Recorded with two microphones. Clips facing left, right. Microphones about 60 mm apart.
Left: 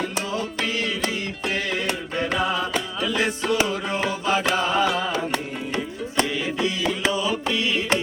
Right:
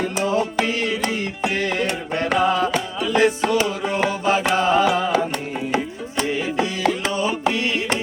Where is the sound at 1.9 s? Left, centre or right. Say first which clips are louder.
Right 2 dB; centre.